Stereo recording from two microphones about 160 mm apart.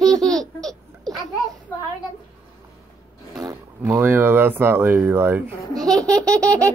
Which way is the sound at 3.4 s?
20° right (ahead or behind).